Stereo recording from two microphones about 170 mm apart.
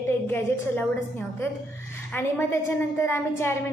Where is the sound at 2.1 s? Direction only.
15° left (ahead or behind).